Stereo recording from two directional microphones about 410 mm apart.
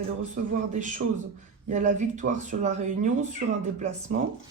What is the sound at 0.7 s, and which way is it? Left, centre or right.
Speech, centre.